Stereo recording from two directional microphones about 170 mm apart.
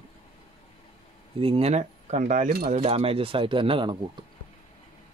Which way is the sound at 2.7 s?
35° right (ahead or behind).